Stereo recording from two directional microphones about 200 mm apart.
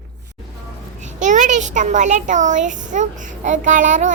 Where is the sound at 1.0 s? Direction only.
40° right (ahead or behind).